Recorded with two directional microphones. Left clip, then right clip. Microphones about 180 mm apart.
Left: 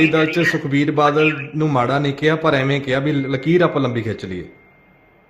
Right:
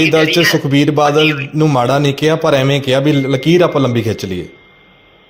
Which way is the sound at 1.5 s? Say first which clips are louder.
Right 8 dB; 10° right (ahead or behind).